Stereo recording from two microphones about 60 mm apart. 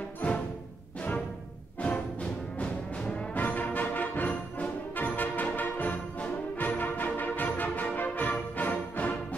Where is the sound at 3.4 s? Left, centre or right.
Left.